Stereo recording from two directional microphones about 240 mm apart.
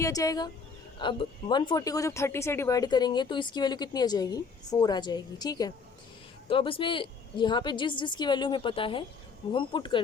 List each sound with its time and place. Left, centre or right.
0.0 s a woman's voice: centre